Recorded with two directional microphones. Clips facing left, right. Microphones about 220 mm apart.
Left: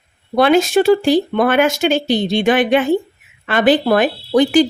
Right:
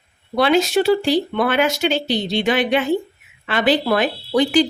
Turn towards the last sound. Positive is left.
turn(degrees=50)  # may be behind; listen again after turning